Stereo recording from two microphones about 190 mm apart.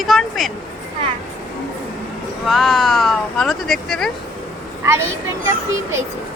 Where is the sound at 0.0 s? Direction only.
Centre (ahead or behind).